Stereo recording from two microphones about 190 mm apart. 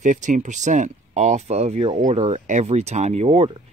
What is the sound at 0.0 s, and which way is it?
Speech, 40° right (ahead or behind).